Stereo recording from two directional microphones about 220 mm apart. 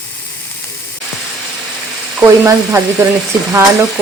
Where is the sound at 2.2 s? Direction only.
10° right (ahead or behind).